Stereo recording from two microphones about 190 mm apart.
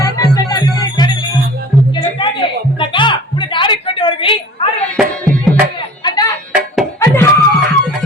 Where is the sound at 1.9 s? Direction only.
25° left (ahead or behind).